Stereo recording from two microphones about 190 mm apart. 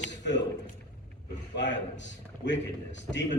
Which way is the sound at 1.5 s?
70° left (ahead or behind).